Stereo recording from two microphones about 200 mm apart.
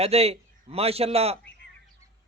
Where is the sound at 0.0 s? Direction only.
30° right (ahead or behind).